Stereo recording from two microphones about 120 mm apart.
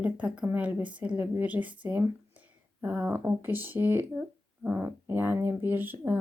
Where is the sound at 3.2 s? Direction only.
20° right (ahead or behind).